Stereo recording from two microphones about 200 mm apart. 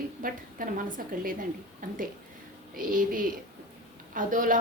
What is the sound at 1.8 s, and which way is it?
A woman's voice, 45° right (ahead or behind).